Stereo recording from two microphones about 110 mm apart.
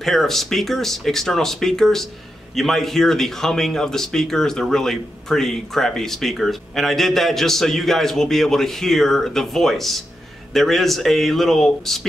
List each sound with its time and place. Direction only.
0.0 s speech: 5° left (ahead or behind)